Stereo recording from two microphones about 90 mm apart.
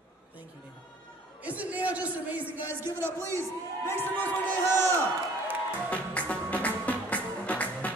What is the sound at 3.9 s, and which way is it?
Music, 25° left (ahead or behind).